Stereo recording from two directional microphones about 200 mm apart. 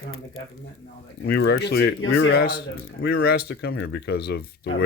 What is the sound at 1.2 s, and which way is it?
Speech, 55° left (ahead or behind).